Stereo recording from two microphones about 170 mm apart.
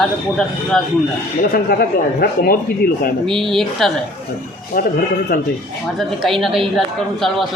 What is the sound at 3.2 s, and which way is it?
Speech, centre (ahead or behind).